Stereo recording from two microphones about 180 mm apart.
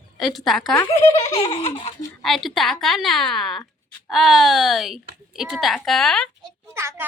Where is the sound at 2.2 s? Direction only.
Centre (ahead or behind).